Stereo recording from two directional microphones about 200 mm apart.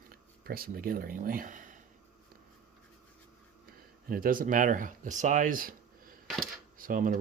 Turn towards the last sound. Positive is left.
turn(degrees=-40)  # may be behind; listen again after turning